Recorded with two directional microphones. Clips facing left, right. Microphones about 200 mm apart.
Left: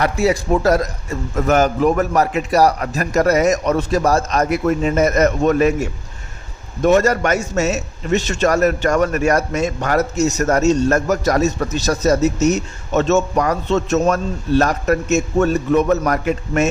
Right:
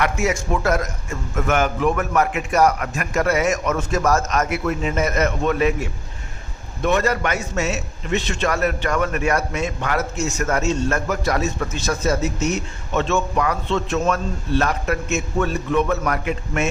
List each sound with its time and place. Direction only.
0.0 s a man's voice: 35° left (ahead or behind)